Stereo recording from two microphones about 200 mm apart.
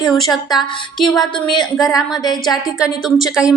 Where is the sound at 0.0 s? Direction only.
Centre (ahead or behind).